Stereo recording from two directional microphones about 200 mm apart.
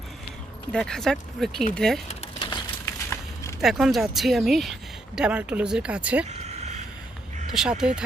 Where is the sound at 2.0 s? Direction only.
25° left (ahead or behind).